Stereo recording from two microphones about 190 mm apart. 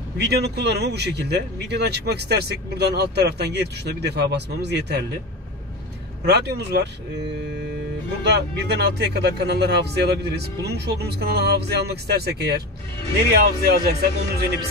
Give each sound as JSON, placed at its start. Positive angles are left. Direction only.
{"t": 0.2, "sound": "speech", "side_deg": -60}
{"t": 6.2, "sound": "speech", "side_deg": -60}
{"t": 8.2, "sound": "speech", "side_deg": -65}
{"t": 13.7, "sound": "speech", "side_deg": -60}